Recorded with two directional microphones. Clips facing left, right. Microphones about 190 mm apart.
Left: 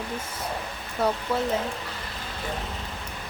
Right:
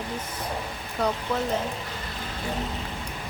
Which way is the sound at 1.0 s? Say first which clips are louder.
Left 1 dB; 5° left (ahead or behind).